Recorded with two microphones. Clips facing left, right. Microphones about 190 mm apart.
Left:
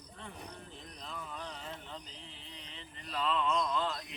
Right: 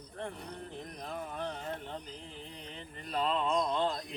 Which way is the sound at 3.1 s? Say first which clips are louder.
Right 2 dB; 40° right (ahead or behind).